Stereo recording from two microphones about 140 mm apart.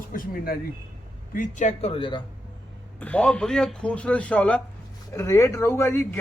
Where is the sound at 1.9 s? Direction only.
40° left (ahead or behind).